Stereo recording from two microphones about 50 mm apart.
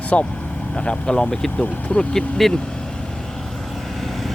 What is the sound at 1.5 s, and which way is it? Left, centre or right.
Speech, left.